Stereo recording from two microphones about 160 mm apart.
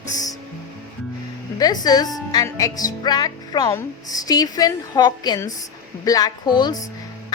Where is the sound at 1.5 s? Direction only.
25° left (ahead or behind).